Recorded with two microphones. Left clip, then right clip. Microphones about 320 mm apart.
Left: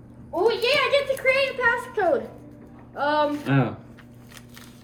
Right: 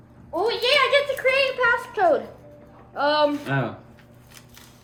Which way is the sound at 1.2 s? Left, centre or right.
Right.